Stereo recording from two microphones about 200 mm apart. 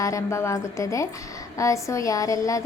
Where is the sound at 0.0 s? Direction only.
15° left (ahead or behind).